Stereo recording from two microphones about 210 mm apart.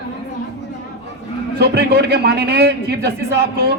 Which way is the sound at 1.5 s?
50° right (ahead or behind).